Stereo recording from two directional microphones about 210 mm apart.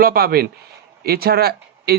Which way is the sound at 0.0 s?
45° right (ahead or behind).